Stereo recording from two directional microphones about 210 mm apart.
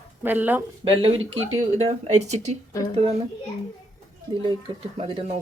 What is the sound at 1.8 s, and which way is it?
Speech, 30° right (ahead or behind).